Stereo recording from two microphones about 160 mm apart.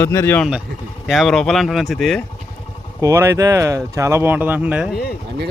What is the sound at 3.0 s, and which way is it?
Speech, 15° right (ahead or behind).